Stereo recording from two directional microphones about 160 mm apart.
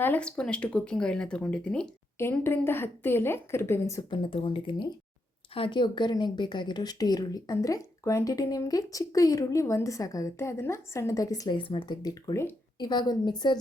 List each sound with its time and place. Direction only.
0.0 s speech: 10° left (ahead or behind)
4.1 s a woman's voice: 35° left (ahead or behind)